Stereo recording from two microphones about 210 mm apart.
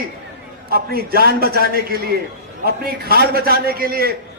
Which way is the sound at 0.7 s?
45° right (ahead or behind).